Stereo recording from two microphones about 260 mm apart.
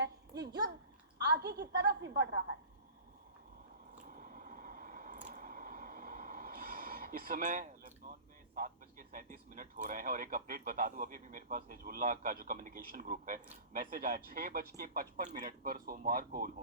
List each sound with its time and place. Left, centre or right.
0.3 s a child's voice: centre
1.2 s speech: right
4.1 s squish: right
8.5 s speech: right